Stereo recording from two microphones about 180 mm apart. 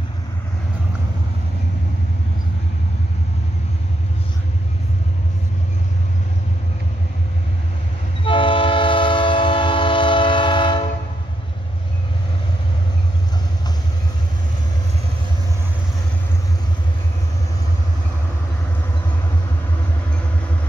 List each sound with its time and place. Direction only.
8.2 s train: 30° left (ahead or behind)